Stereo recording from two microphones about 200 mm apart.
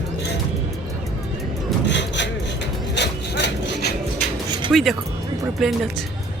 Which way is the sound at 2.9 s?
60° left (ahead or behind).